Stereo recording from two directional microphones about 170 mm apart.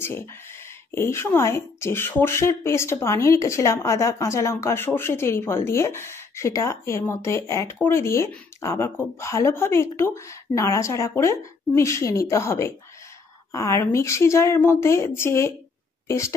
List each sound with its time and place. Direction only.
0.0 s a woman's voice: 15° left (ahead or behind)